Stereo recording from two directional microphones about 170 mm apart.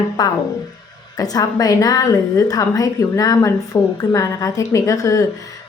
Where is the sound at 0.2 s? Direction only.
25° left (ahead or behind).